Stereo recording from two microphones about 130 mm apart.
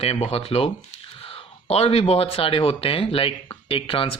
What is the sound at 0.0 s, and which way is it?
Speech, 50° left (ahead or behind).